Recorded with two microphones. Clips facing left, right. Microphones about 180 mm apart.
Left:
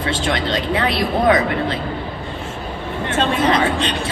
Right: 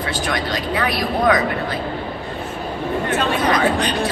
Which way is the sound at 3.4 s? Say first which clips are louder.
Even; 25° left (ahead or behind).